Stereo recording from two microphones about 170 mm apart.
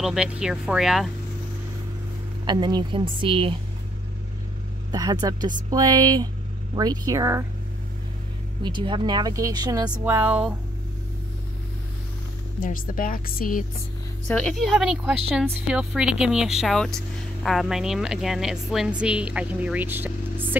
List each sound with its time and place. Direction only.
0.0 s speech: 5° right (ahead or behind)
2.4 s speech: 25° right (ahead or behind)
4.9 s speech: 25° right (ahead or behind)
8.6 s speech: 30° right (ahead or behind)
9.8 s speech: 10° right (ahead or behind)
12.6 s speech: 55° left (ahead or behind)
14.2 s speech: 5° left (ahead or behind); by 20.5 s 10° right (ahead or behind)